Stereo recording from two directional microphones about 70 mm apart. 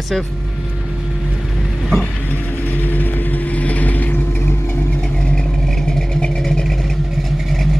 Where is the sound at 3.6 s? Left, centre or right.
Left.